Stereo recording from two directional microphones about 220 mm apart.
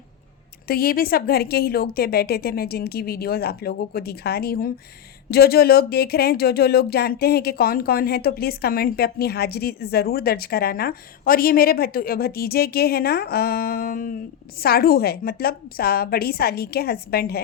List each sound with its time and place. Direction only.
0.7 s speech: 40° left (ahead or behind)